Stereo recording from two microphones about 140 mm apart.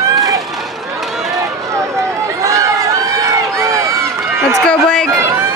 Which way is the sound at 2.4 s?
20° right (ahead or behind).